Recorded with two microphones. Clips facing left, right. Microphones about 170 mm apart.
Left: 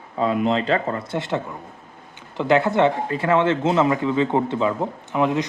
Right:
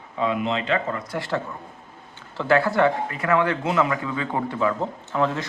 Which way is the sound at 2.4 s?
20° left (ahead or behind).